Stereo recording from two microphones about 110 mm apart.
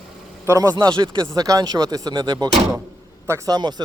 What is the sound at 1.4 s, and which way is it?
Speech, 35° right (ahead or behind).